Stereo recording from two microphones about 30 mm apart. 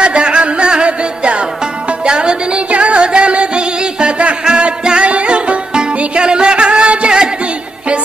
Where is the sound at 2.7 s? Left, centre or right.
Right.